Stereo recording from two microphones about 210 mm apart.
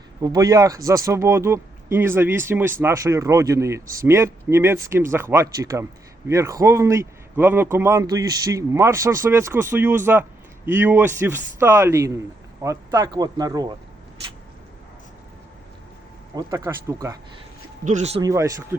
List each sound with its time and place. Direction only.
0.2 s speech: 15° right (ahead or behind)
16.3 s speech: 15° right (ahead or behind)
17.8 s speech: 35° right (ahead or behind)
18.2 s speech: 15° right (ahead or behind)